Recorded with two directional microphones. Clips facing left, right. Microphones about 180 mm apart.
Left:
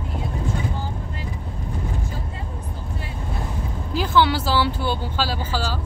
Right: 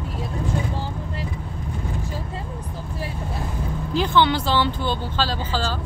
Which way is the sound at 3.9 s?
5° left (ahead or behind).